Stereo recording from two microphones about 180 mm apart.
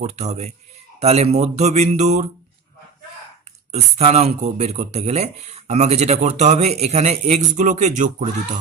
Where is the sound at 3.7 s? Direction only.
35° right (ahead or behind).